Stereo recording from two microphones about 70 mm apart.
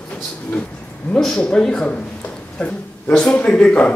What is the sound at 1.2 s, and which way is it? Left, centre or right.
Speech, centre.